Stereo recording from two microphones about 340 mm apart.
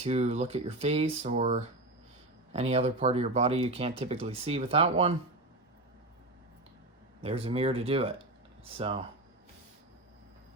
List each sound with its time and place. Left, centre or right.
0.0 s speech: centre
7.2 s speech: centre